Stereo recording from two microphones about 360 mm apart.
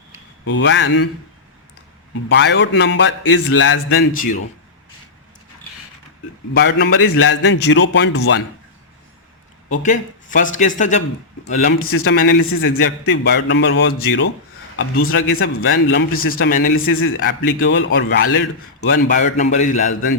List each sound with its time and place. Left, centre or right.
0.4 s speech: left
2.3 s a man's voice: left
6.6 s a man's voice: left
9.6 s a man's voice: left
12.5 s a man's voice: left